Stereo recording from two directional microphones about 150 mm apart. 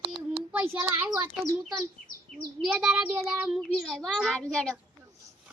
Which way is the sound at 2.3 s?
Centre (ahead or behind).